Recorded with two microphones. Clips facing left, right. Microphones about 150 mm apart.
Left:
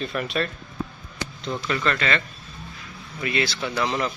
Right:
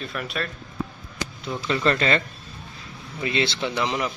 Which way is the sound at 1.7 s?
30° right (ahead or behind).